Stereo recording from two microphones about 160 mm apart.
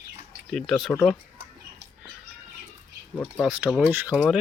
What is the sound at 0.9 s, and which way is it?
Speech, 15° left (ahead or behind).